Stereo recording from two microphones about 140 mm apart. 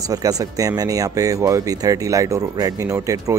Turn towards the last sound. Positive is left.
turn(degrees=-25)  # may be behind; listen again after turning